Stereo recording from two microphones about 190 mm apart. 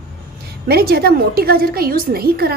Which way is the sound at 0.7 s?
55° right (ahead or behind).